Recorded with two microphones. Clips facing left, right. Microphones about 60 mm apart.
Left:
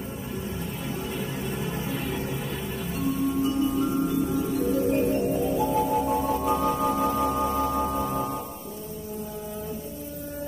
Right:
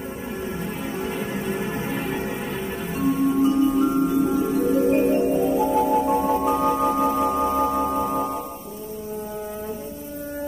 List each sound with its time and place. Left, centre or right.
0.6 s music: right